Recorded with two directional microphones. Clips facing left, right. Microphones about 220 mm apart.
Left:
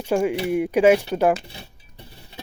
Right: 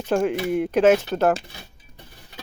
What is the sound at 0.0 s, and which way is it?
Speech, 10° left (ahead or behind).